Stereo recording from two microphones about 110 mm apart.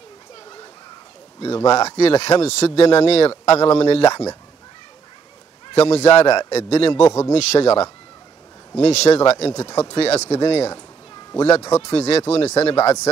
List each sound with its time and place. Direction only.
1.4 s speech: 70° left (ahead or behind)
5.8 s speech: 70° left (ahead or behind)
6.9 s a man's voice: 35° left (ahead or behind)
7.3 s speech: 70° left (ahead or behind)
11.7 s speech: 75° left (ahead or behind)